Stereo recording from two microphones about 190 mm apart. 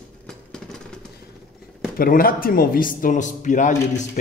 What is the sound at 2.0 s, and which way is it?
Speech, 50° left (ahead or behind).